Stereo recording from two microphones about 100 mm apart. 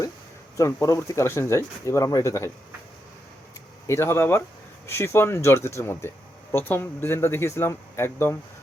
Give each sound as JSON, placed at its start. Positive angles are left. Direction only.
{"t": 0.5, "sound": "speech", "side_deg": 35}
{"t": 3.8, "sound": "speech", "side_deg": 25}